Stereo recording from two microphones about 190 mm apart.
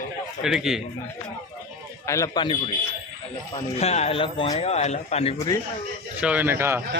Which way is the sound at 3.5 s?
35° left (ahead or behind).